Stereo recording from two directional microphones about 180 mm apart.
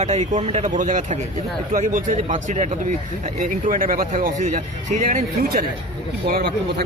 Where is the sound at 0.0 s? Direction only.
40° right (ahead or behind).